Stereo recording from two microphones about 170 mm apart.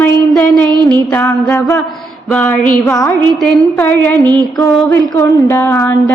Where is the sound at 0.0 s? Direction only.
5° left (ahead or behind).